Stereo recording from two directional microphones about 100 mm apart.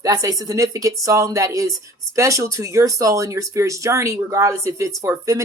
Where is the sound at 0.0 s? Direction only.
35° right (ahead or behind).